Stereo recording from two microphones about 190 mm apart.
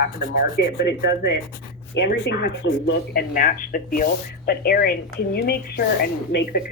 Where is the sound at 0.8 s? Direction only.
65° left (ahead or behind).